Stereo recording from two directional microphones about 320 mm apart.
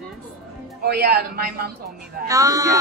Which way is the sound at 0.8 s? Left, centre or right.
Right.